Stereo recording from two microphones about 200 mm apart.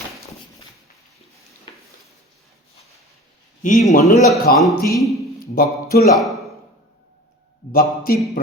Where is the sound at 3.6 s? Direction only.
40° left (ahead or behind).